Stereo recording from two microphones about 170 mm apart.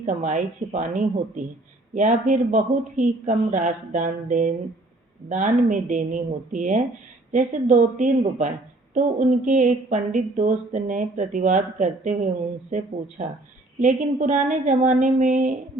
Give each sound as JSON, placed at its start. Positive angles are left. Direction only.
{"t": 0.0, "sound": "a woman's voice", "side_deg": -45}
{"t": 5.6, "sound": "a woman's voice", "side_deg": -50}
{"t": 13.7, "sound": "a woman's voice", "side_deg": -45}